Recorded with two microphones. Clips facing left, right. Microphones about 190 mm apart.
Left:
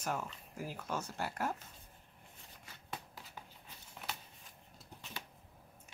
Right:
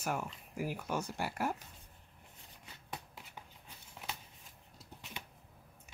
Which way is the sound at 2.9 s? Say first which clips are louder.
Even; 20° right (ahead or behind).